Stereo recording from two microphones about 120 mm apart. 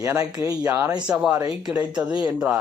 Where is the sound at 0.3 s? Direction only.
30° right (ahead or behind).